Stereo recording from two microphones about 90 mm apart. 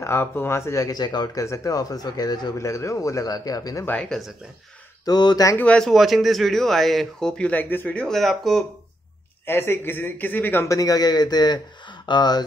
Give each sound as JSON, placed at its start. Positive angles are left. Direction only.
{"t": 0.0, "sound": "speech", "side_deg": 25}
{"t": 1.4, "sound": "a man's voice", "side_deg": 35}
{"t": 2.6, "sound": "speech", "side_deg": 35}
{"t": 3.8, "sound": "speech", "side_deg": 15}
{"t": 5.0, "sound": "a man's voice", "side_deg": 50}
{"t": 5.6, "sound": "speech", "side_deg": 15}
{"t": 5.9, "sound": "speech", "side_deg": 0}
{"t": 8.1, "sound": "speech", "side_deg": 0}
{"t": 9.5, "sound": "speech", "side_deg": 25}
{"t": 10.7, "sound": "a man's voice", "side_deg": 40}